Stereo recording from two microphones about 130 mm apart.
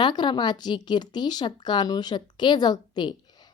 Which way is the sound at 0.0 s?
35° left (ahead or behind).